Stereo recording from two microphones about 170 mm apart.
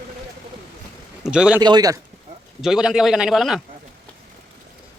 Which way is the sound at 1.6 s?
25° right (ahead or behind).